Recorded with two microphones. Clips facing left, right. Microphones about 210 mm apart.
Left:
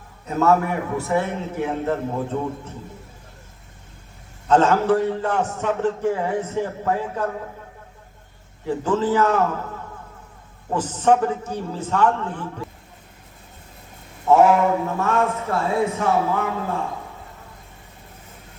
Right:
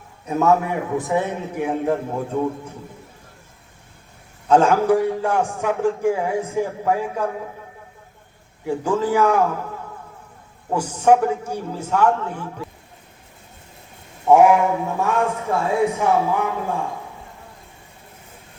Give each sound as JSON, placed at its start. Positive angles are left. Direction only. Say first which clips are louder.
{"t": 0.3, "sound": "a man's voice", "louder": "right 1 dB", "side_deg": -15}
{"t": 4.4, "sound": "a man's voice", "louder": "right 1 dB", "side_deg": -10}
{"t": 8.6, "sound": "a man's voice", "louder": "even", "side_deg": -10}
{"t": 10.8, "sound": "a man's voice", "louder": "right 2 dB", "side_deg": -10}
{"t": 14.3, "sound": "a man's voice", "louder": "right 2 dB", "side_deg": -15}